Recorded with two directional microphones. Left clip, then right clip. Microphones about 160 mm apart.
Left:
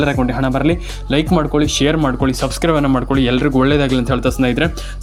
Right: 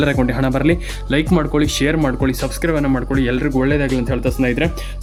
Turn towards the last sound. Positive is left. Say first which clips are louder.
# left 2 dB
turn(degrees=20)  # may be behind; listen again after turning